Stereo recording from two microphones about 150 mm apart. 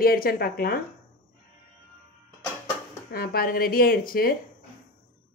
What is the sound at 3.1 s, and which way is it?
A woman's voice, 90° left.